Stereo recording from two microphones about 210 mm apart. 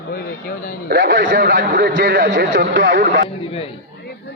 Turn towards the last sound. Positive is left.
turn(degrees=25)  # may be behind; listen again after turning